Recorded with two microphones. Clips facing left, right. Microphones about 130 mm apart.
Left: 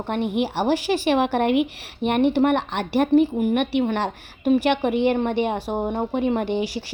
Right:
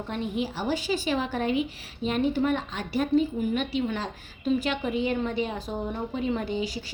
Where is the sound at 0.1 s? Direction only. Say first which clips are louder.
Left 7 dB; 65° left (ahead or behind).